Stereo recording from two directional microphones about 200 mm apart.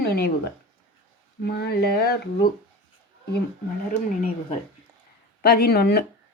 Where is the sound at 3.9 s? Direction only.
45° left (ahead or behind).